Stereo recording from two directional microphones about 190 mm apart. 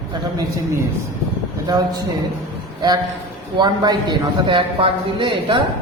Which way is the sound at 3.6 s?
25° right (ahead or behind).